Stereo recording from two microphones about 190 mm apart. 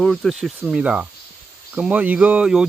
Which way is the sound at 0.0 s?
Centre (ahead or behind).